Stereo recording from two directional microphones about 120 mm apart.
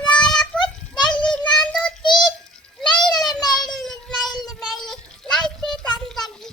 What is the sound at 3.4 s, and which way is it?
Child singing, 35° left (ahead or behind).